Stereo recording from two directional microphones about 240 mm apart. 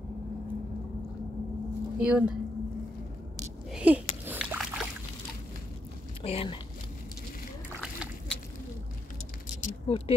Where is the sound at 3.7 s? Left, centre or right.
Centre.